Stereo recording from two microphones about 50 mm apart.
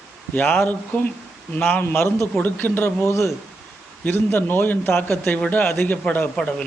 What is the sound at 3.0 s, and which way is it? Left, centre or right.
Speech, left.